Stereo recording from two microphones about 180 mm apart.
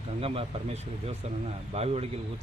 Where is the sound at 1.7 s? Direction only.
35° right (ahead or behind).